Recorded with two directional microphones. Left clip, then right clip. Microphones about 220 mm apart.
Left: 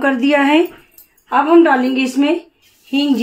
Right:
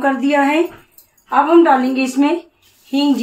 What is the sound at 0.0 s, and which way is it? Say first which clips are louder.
Speech: left 1 dB; 40° left (ahead or behind).